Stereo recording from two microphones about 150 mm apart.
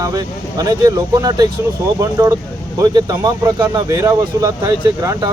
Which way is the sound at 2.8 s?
25° right (ahead or behind).